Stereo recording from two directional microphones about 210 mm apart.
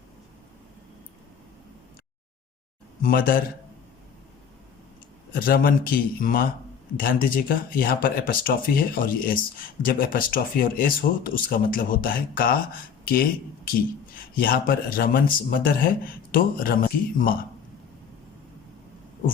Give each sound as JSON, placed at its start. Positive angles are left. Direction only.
{"t": 3.0, "sound": "speech", "side_deg": 40}
{"t": 5.3, "sound": "speech", "side_deg": 45}
{"t": 14.3, "sound": "speech", "side_deg": 45}